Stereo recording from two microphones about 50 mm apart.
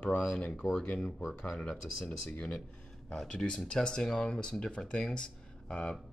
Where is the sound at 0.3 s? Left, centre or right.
Left.